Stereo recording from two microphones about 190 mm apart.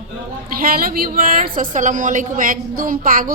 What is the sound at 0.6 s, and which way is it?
A woman's voice, 50° right (ahead or behind).